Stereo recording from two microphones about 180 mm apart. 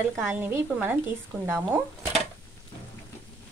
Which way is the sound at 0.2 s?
10° right (ahead or behind).